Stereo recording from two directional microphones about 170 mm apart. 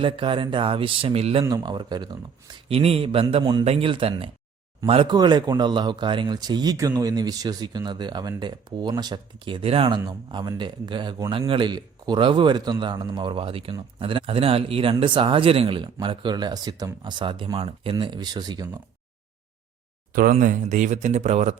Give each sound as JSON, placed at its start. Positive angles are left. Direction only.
{"t": 0.0, "sound": "speech", "side_deg": -30}
{"t": 1.5, "sound": "a man's voice", "side_deg": -25}
{"t": 20.1, "sound": "speech", "side_deg": -50}